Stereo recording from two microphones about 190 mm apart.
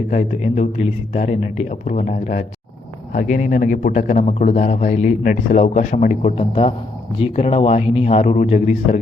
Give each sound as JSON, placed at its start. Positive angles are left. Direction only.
{"t": 0.1, "sound": "speech", "side_deg": 40}